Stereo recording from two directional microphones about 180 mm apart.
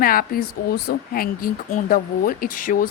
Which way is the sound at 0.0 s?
55° left (ahead or behind).